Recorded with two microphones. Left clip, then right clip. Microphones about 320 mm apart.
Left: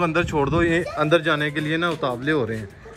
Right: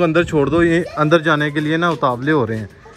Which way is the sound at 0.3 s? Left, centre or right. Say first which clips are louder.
Right 5 dB; right.